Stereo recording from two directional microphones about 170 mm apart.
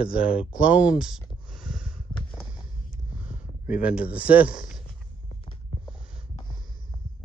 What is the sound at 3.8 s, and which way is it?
Speech, 10° right (ahead or behind).